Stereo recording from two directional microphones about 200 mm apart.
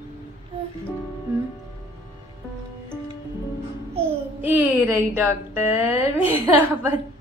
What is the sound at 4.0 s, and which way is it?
A child's voice, 10° right (ahead or behind).